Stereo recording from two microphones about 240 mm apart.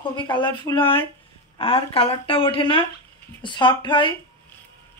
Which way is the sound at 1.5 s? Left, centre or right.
Left.